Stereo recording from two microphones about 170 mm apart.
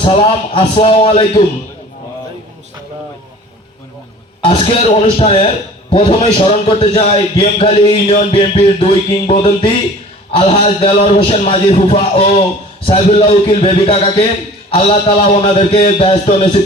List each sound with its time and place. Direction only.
0.0 s a man's voice: 35° left (ahead or behind)
4.4 s a man's voice: 35° left (ahead or behind)